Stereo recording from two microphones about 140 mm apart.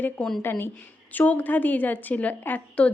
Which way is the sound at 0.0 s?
5° left (ahead or behind).